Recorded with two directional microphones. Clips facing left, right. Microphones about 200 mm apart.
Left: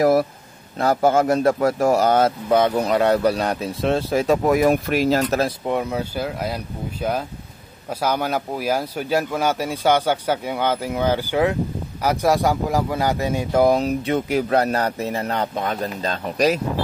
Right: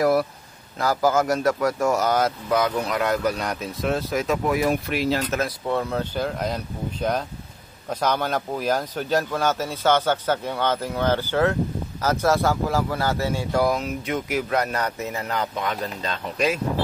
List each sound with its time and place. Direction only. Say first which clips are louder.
0.0 s speech: left 3 dB; 25° left (ahead or behind)
4.5 s speech: left 5 dB; 50° left (ahead or behind)
5.7 s a man's voice: left 2 dB; 15° left (ahead or behind)
13.7 s speech: left 6 dB; 35° left (ahead or behind)